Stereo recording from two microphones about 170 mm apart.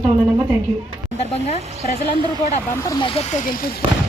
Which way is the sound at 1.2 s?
40° left (ahead or behind).